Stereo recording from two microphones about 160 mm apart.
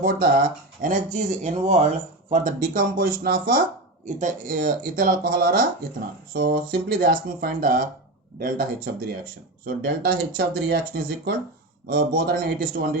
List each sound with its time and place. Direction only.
0.0 s speech: 60° right (ahead or behind)
0.8 s speech: 50° right (ahead or behind)
2.3 s speech: 55° right (ahead or behind)